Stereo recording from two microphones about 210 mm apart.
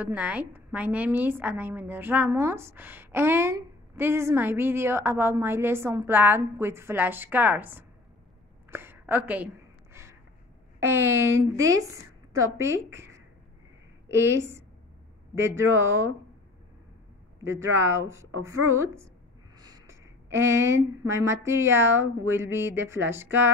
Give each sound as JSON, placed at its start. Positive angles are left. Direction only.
{"t": 0.0, "sound": "a woman's voice", "side_deg": -5}
{"t": 10.8, "sound": "a woman's voice", "side_deg": -10}
{"t": 17.4, "sound": "a woman's voice", "side_deg": -15}
{"t": 19.6, "sound": "a sound", "side_deg": -20}
{"t": 20.3, "sound": "a woman's voice", "side_deg": -15}